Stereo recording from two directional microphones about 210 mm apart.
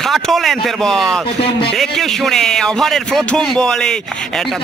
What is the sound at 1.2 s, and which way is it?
Speech, 25° left (ahead or behind).